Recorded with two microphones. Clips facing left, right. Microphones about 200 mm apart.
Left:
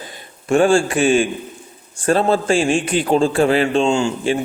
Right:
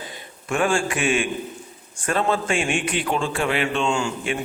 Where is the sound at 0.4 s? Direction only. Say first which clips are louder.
Left 8 dB; 30° left (ahead or behind).